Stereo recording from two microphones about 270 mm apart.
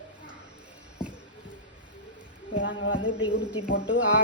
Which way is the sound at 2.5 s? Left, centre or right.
Left.